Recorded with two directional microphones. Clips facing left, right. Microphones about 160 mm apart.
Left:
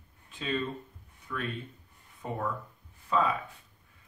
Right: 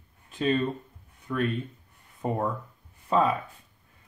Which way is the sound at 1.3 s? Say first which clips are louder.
Right 8 dB; 35° right (ahead or behind).